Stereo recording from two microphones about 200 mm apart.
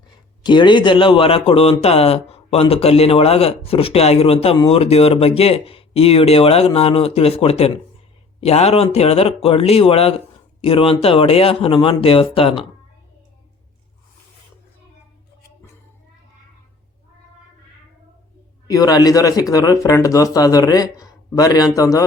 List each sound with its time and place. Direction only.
0.4 s a man's voice: 25° left (ahead or behind)
18.7 s speech: 20° left (ahead or behind)